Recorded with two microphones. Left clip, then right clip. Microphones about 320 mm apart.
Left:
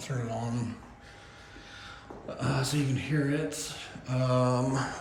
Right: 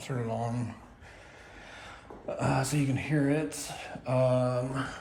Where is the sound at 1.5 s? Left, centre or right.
Right.